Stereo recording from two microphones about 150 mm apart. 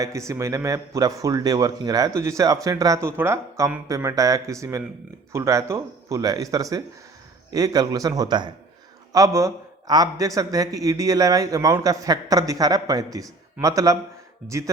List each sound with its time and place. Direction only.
0.0 s speech: 20° right (ahead or behind)
14.4 s speech: 50° right (ahead or behind)